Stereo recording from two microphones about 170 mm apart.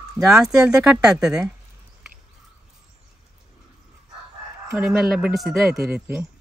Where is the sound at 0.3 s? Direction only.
5° right (ahead or behind).